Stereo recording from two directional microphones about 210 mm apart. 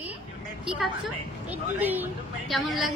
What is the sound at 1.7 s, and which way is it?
A woman's voice, 10° right (ahead or behind).